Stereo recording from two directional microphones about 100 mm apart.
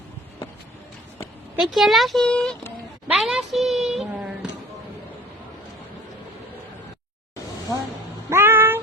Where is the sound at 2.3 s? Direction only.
10° left (ahead or behind).